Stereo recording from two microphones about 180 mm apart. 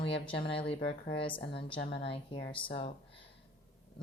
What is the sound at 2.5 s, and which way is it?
Speech, 30° left (ahead or behind).